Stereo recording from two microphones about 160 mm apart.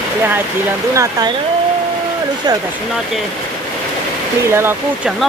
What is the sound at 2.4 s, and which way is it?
Speech, 25° right (ahead or behind).